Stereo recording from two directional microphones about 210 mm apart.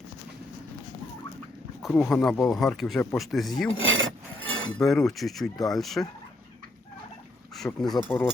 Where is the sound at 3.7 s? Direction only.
70° right (ahead or behind).